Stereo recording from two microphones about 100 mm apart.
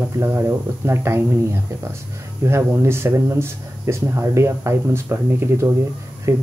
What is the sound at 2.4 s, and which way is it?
Speech, 25° right (ahead or behind).